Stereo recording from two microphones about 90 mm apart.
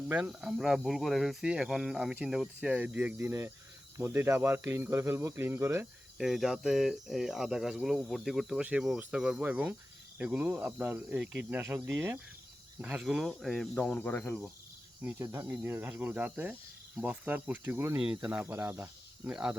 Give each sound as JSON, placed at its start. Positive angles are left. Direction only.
{"t": 0.3, "sound": "speech", "side_deg": -5}
{"t": 2.3, "sound": "cricket", "side_deg": -10}
{"t": 3.2, "sound": "speech", "side_deg": -30}
{"t": 6.1, "sound": "speech", "side_deg": -5}
{"t": 9.0, "sound": "cricket", "side_deg": -15}
{"t": 11.5, "sound": "speech", "side_deg": -25}
{"t": 12.8, "sound": "cricket", "side_deg": -10}
{"t": 13.2, "sound": "speech", "side_deg": 0}
{"t": 13.7, "sound": "speech", "side_deg": 15}
{"t": 14.1, "sound": "cricket", "side_deg": 20}
{"t": 15.2, "sound": "speech", "side_deg": -30}
{"t": 17.0, "sound": "cricket", "side_deg": -15}
{"t": 18.4, "sound": "speech", "side_deg": -25}